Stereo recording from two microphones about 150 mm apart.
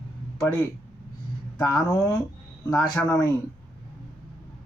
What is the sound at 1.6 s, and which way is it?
Speech, 25° left (ahead or behind).